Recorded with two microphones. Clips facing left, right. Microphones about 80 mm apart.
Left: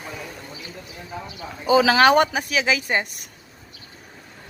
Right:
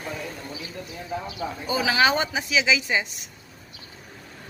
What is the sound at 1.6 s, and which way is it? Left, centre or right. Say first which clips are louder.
Speech: left 7 dB; left.